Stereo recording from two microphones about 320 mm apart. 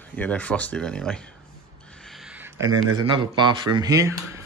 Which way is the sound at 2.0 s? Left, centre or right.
Centre.